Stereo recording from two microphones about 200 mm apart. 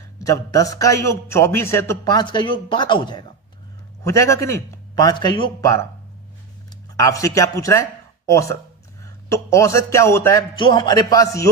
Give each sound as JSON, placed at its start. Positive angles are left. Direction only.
{"t": 0.2, "sound": "a man's voice", "side_deg": 15}